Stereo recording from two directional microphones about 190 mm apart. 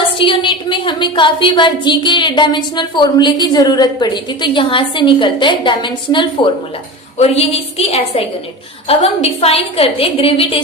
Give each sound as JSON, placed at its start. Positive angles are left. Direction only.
{"t": 0.2, "sound": "a woman's voice", "side_deg": 25}